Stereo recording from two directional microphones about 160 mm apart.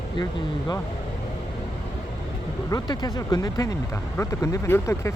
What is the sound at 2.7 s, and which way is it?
Speech, 25° left (ahead or behind).